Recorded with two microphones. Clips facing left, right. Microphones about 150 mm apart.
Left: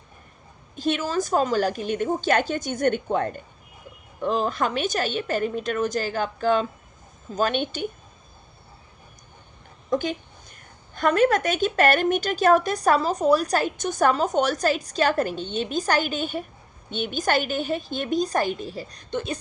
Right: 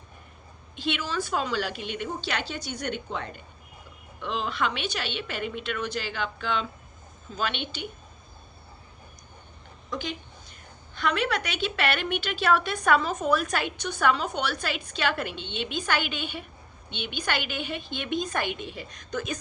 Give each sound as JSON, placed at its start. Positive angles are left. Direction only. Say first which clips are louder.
{"t": 0.8, "sound": "a woman's voice", "louder": "left 6 dB", "side_deg": 45}
{"t": 9.9, "sound": "a woman's voice", "louder": "left 9 dB", "side_deg": 50}